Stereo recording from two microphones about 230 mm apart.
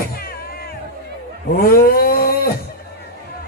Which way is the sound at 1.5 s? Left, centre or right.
Left.